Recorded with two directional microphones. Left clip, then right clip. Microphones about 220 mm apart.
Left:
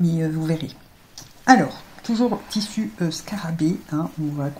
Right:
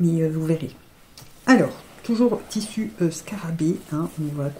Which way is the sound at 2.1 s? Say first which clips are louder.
Right 1 dB; 40° right (ahead or behind).